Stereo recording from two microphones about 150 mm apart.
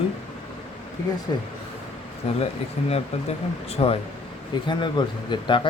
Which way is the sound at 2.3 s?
45° left (ahead or behind).